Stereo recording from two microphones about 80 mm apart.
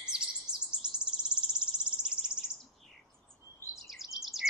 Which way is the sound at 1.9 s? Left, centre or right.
Centre.